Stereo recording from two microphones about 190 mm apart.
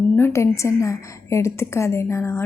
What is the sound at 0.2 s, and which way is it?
A woman's voice, 15° left (ahead or behind).